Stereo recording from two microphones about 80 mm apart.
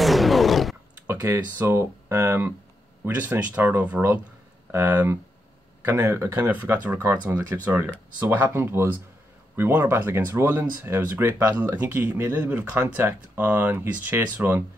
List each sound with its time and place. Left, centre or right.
0.0 s a sound: centre
1.3 s speech: right
3.5 s speech: centre
6.4 s speech: right
7.0 s speech: right
7.3 s speech: right